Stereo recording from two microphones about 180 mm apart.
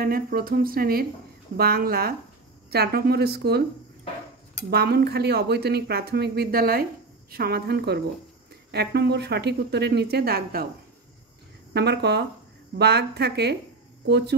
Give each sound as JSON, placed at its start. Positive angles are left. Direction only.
{"t": 0.0, "sound": "speech", "side_deg": -55}
{"t": 4.6, "sound": "speech", "side_deg": -60}
{"t": 11.7, "sound": "speech", "side_deg": -65}